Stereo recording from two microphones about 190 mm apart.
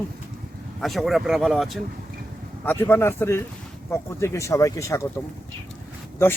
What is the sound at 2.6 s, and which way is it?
Speech, 10° left (ahead or behind).